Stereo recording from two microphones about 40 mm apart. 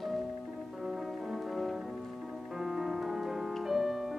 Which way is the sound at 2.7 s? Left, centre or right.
Centre.